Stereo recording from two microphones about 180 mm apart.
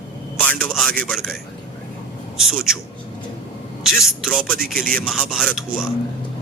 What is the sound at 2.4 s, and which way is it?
Speech, 5° right (ahead or behind).